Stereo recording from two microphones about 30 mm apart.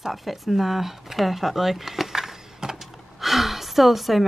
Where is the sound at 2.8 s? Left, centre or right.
Centre.